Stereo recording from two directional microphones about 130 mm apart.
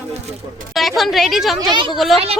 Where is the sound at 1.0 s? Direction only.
Centre (ahead or behind).